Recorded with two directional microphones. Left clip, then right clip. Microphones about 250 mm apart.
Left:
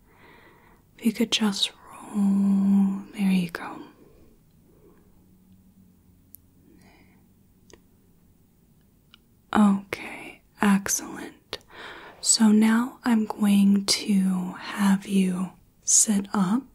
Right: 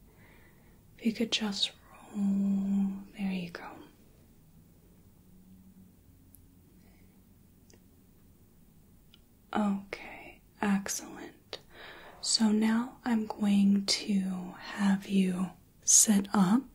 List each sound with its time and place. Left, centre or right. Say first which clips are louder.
0.9 s whispering: left 6 dB; left
9.1 s whispering: left 9 dB; left; by 15.5 s centre
15.8 s a woman's voice: left 2 dB; centre